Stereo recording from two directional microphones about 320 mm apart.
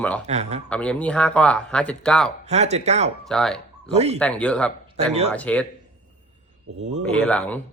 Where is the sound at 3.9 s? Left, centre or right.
Centre.